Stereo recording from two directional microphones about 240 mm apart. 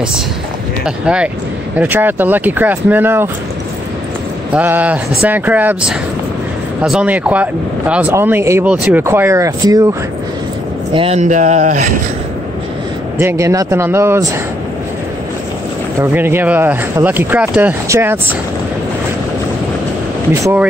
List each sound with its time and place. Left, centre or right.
0.8 s speech: centre
4.6 s speech: centre
10.9 s speech: right
13.2 s speech: centre
16.0 s speech: centre